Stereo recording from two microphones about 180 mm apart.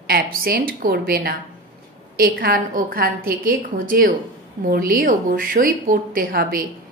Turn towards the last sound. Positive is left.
turn(degrees=-55)  # may be behind; listen again after turning